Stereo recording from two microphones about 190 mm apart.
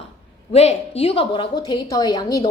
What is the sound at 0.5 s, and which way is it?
A woman's voice, 35° left (ahead or behind).